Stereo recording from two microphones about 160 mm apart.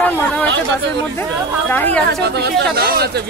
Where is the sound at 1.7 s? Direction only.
10° left (ahead or behind).